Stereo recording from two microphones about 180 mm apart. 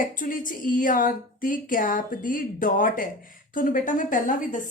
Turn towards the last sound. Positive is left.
turn(degrees=45)  # may be behind; listen again after turning